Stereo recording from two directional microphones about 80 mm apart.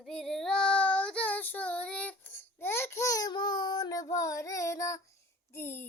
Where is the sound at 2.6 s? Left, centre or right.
Left.